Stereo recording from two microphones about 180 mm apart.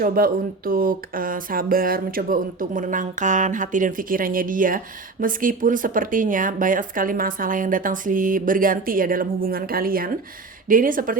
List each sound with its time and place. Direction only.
0.0 s speech: 55° right (ahead or behind)